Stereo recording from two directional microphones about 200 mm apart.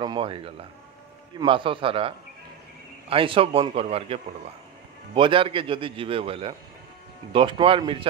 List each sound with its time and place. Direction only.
0.0 s a man's voice: 25° right (ahead or behind)